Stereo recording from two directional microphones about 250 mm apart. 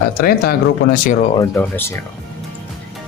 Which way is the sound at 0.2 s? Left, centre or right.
Left.